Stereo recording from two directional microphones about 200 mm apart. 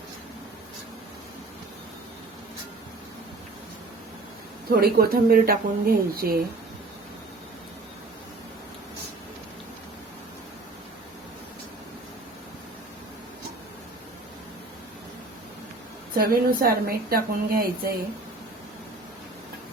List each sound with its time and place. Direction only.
4.7 s a woman's voice: 50° right (ahead or behind)
16.1 s a woman's voice: 45° right (ahead or behind)